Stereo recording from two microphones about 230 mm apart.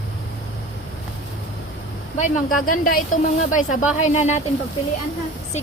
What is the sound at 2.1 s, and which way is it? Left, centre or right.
Speech, left.